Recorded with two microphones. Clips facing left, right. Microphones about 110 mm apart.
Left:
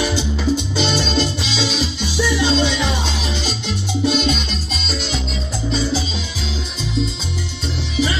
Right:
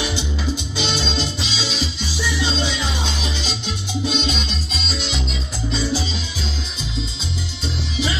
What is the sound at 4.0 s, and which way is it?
Salsa music, 55° left (ahead or behind).